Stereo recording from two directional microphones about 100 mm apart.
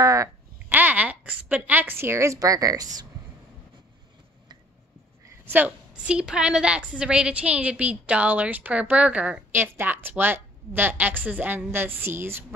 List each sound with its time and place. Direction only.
0.0 s a sound: 35° right (ahead or behind)
0.7 s speech: 15° right (ahead or behind); by 3.1 s 40° right (ahead or behind)
5.2 s a woman's voice: 25° right (ahead or behind)